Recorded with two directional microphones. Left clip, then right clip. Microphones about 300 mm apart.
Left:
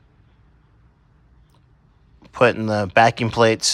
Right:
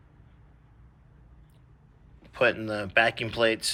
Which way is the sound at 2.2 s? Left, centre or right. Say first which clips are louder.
Left 8 dB; left.